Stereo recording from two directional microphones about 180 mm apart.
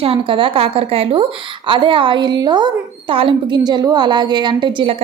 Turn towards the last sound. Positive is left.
turn(degrees=-25)  # may be behind; listen again after turning